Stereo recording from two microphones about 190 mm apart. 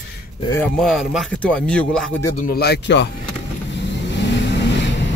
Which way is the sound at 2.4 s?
55° left (ahead or behind).